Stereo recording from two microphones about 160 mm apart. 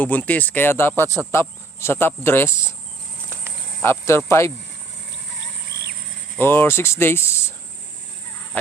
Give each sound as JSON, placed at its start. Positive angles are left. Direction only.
{"t": 0.0, "sound": "speech", "side_deg": 10}
{"t": 3.8, "sound": "speech", "side_deg": 15}
{"t": 6.3, "sound": "speech", "side_deg": 15}